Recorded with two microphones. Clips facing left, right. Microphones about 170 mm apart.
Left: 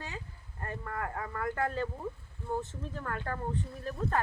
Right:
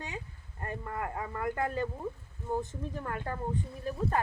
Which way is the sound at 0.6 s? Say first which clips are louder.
Right 1 dB; 15° right (ahead or behind).